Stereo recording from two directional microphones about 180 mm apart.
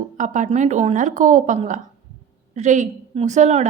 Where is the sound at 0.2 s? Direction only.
40° right (ahead or behind).